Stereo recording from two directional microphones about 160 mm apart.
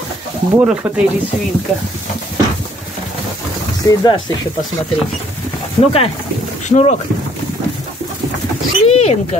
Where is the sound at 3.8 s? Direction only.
20° left (ahead or behind).